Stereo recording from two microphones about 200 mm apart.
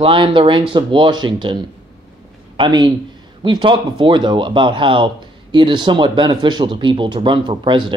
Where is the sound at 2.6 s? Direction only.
20° right (ahead or behind).